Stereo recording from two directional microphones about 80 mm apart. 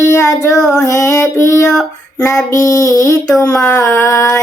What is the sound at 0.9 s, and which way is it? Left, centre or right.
Child singing, left.